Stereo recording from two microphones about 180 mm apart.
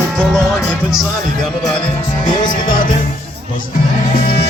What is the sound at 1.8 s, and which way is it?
Music, 25° left (ahead or behind).